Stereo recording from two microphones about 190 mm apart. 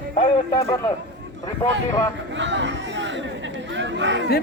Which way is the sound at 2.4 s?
70° right (ahead or behind).